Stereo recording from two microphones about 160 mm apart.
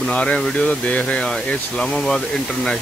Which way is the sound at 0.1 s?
5° left (ahead or behind).